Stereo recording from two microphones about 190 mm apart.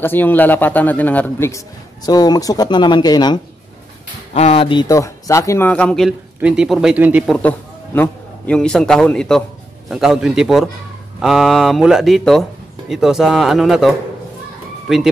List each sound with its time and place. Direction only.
0.0 s speech: 10° left (ahead or behind)
4.3 s a man's voice: 35° left (ahead or behind); by 15.0 s centre (ahead or behind)